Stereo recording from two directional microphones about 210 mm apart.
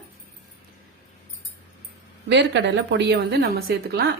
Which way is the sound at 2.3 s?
55° right (ahead or behind).